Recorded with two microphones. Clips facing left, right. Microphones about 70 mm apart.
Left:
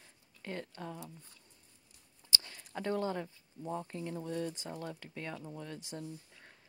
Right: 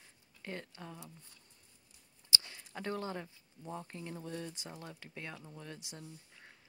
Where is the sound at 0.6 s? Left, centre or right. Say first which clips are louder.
Left 5 dB; left.